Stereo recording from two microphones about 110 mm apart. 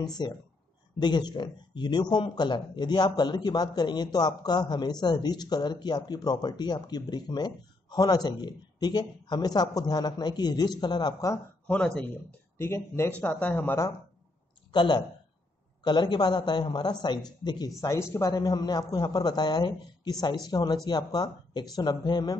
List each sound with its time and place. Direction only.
0.2 s speech: 40° left (ahead or behind)
11.6 s speech: 10° left (ahead or behind)
12.5 s speech: 25° left (ahead or behind)
14.7 s speech: 45° left (ahead or behind)